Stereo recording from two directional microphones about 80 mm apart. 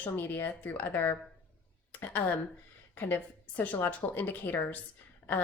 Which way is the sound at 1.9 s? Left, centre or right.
Left.